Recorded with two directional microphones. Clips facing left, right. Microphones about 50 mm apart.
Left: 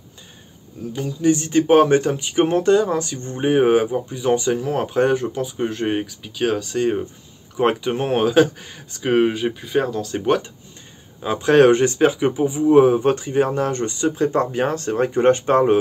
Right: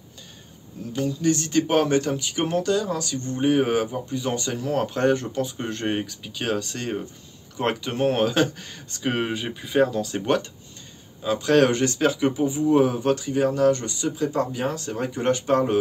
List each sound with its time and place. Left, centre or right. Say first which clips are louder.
0.9 s speech: left 4 dB; centre
11.1 s speech: left 4 dB; left